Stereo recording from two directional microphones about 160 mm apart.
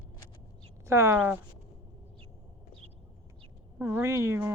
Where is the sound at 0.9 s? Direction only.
15° right (ahead or behind).